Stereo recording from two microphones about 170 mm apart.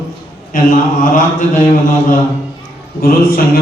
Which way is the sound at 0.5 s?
50° left (ahead or behind).